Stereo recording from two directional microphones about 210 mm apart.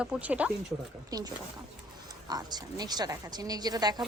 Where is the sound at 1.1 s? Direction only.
20° right (ahead or behind).